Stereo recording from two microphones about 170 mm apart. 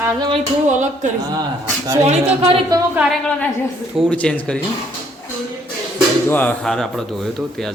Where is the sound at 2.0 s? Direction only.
40° right (ahead or behind).